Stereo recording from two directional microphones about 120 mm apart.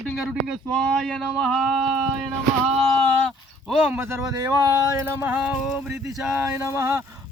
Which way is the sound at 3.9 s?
20° right (ahead or behind).